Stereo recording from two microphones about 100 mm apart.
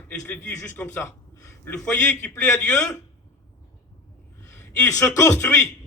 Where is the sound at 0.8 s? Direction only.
25° left (ahead or behind).